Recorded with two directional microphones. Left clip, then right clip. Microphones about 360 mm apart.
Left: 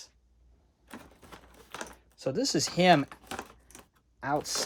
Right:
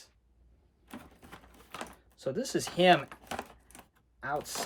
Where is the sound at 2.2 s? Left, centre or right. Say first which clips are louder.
Left 4 dB; centre.